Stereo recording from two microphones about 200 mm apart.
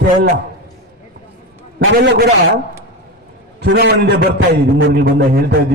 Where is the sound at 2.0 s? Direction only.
60° right (ahead or behind).